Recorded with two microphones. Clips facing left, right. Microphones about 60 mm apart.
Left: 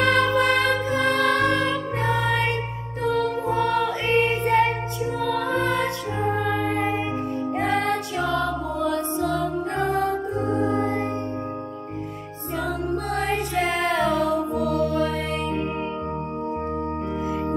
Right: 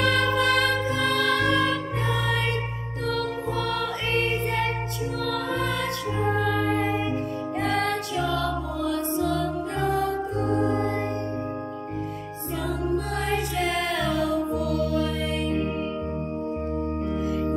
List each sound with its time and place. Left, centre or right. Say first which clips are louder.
0.0 s music: left 3 dB; left
6.4 s music: left 1 dB; left
12.9 s music: left 2 dB; left